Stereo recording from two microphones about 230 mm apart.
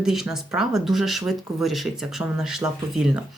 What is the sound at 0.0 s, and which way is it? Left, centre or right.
Speech, centre.